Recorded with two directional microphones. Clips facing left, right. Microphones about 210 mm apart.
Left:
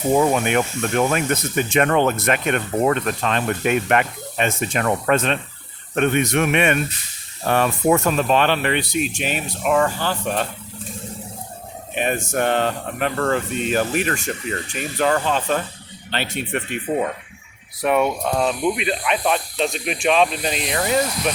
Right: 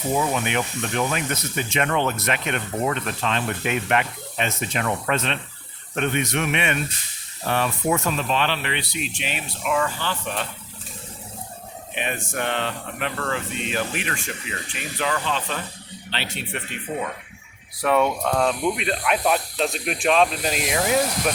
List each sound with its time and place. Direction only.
0.1 s speech: 50° left (ahead or behind)
11.9 s speech: 45° left (ahead or behind)
17.8 s speech: 10° left (ahead or behind); by 21.3 s 5° right (ahead or behind)